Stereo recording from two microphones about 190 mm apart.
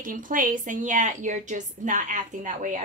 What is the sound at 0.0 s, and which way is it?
A woman's voice, 45° right (ahead or behind).